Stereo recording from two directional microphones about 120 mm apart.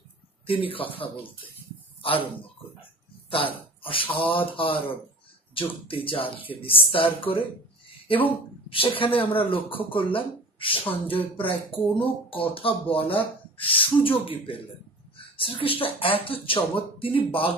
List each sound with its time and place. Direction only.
0.5 s speech: 50° left (ahead or behind)
2.0 s a sound: 50° left (ahead or behind)
3.3 s speech: 50° left (ahead or behind)
8.6 s a woman's voice: 50° left (ahead or behind)